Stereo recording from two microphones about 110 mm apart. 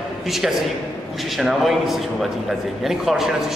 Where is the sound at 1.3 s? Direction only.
Centre (ahead or behind).